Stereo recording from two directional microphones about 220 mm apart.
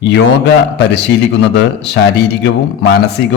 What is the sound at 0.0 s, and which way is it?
Speech, 50° left (ahead or behind).